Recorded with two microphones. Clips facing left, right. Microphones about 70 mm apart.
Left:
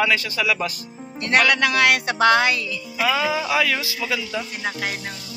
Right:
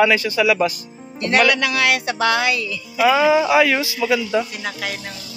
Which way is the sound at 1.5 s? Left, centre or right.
Left.